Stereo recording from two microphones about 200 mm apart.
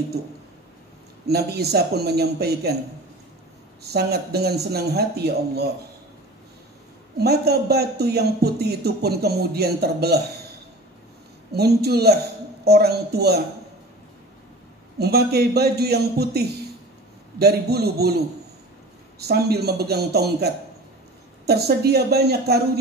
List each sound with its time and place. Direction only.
1.2 s a man's voice: 55° right (ahead or behind)
3.8 s a man's voice: 55° right (ahead or behind)
7.2 s a man's voice: 55° right (ahead or behind)
11.5 s a man's voice: 55° right (ahead or behind)
15.0 s a man's voice: 55° right (ahead or behind)